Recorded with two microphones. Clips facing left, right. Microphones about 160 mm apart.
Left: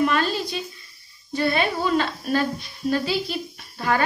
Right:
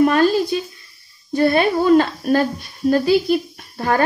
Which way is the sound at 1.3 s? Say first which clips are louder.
Right 7 dB; 50° right (ahead or behind).